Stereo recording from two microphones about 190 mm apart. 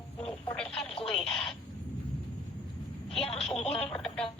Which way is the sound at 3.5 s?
30° left (ahead or behind).